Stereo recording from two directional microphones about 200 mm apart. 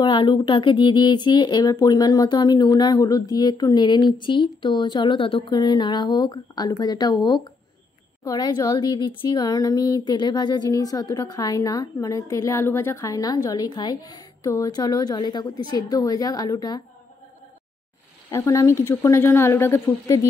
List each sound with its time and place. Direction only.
0.0 s speech: 25° left (ahead or behind)
18.3 s speech: 15° left (ahead or behind)